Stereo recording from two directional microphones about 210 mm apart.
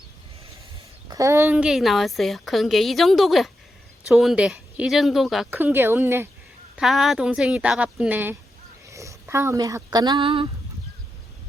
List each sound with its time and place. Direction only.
1.0 s a woman's voice: 15° right (ahead or behind)